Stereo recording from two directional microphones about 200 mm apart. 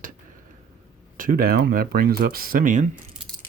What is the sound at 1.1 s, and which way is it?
Speech, 45° right (ahead or behind).